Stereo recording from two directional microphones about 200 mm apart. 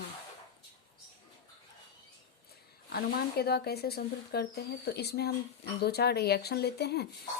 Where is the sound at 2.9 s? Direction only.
50° left (ahead or behind).